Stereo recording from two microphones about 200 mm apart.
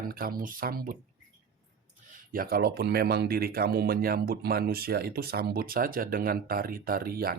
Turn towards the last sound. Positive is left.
turn(degrees=-50)  # may be behind; listen again after turning